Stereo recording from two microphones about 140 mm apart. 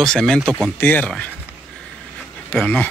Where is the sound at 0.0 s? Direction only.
5° left (ahead or behind).